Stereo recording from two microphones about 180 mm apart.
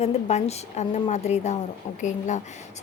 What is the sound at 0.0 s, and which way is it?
A woman's voice, 35° left (ahead or behind).